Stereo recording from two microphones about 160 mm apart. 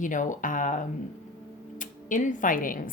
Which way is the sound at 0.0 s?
55° left (ahead or behind).